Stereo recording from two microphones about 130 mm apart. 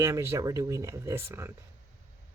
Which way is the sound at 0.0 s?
20° right (ahead or behind).